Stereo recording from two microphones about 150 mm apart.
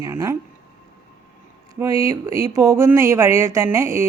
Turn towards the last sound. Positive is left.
turn(degrees=-20)  # may be behind; listen again after turning